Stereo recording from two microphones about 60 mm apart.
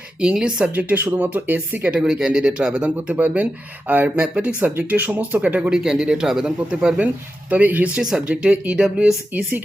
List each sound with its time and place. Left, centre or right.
0.2 s speech: centre
0.7 s speech: right
2.0 s speech: centre
3.2 s speech: right
5.7 s speech: centre
7.5 s speech: right
8.1 s speech: centre
9.3 s speech: right